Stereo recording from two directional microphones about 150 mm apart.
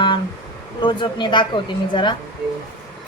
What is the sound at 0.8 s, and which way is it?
Speech, 35° left (ahead or behind).